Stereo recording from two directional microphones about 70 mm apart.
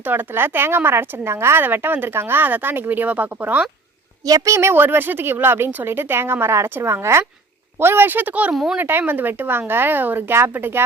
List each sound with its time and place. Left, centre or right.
0.0 s speech: right
4.3 s a woman's voice: right
4.5 s speech: right